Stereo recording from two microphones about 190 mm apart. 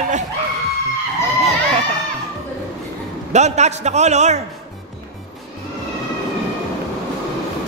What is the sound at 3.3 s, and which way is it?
A man's voice, 35° right (ahead or behind).